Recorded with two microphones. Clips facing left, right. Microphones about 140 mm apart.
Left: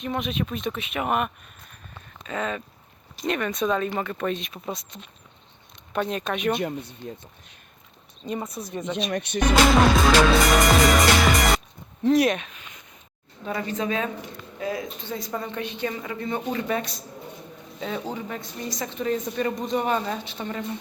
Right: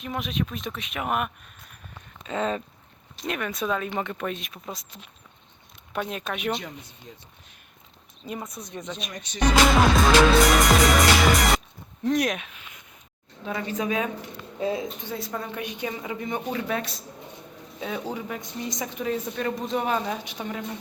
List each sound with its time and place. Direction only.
0.0 s a woman's voice: centre (ahead or behind)
2.2 s a sound: 25° right (ahead or behind)
3.2 s a woman's voice: 5° right (ahead or behind)
6.6 s speech: 55° left (ahead or behind)
8.4 s a woman's voice: 5° left (ahead or behind)
9.1 s speech: 60° left (ahead or behind)
9.7 s music: centre (ahead or behind)
12.0 s a woman's voice: centre (ahead or behind)
13.7 s speech: 10° right (ahead or behind)
14.6 s a sound: 25° right (ahead or behind)
15.1 s a woman's voice: centre (ahead or behind)